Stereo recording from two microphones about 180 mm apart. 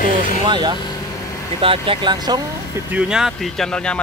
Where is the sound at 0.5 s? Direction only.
25° right (ahead or behind).